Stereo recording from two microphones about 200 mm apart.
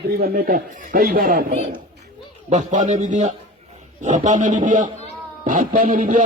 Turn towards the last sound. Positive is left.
turn(degrees=-40)  # may be behind; listen again after turning